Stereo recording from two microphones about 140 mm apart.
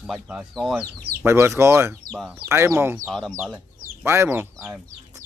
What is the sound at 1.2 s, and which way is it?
Speech, 15° right (ahead or behind).